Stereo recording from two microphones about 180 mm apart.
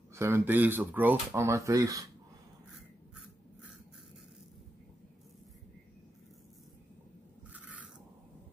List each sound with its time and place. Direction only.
0.1 s speech: 15° right (ahead or behind)
7.5 s scrape: 5° right (ahead or behind)